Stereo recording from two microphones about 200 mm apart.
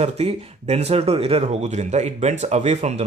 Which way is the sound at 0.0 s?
30° right (ahead or behind).